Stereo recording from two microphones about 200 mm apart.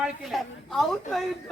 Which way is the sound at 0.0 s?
Centre (ahead or behind).